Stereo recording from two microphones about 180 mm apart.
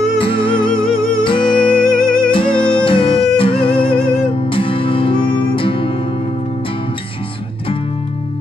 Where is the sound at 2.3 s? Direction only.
30° left (ahead or behind).